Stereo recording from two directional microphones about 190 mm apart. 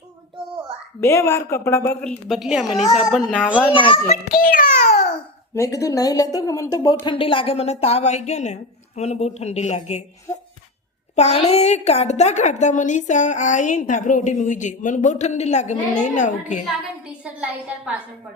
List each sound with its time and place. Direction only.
1.0 s a woman's voice: 15° left (ahead or behind)
3.7 s a woman's voice: 25° left (ahead or behind)
4.4 s babbling: 50° left (ahead or behind)
5.1 s a woman's voice: 15° left (ahead or behind); by 10.0 s 35° left (ahead or behind)
11.1 s a woman's voice: 35° left (ahead or behind)